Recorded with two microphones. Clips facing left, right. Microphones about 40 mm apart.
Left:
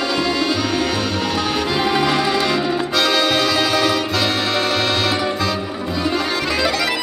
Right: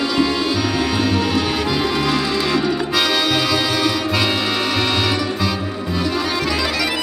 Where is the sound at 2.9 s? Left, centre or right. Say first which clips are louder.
Left 2 dB; centre.